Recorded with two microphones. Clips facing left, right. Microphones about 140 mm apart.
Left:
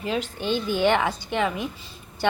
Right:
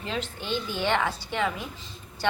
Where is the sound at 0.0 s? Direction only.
15° left (ahead or behind).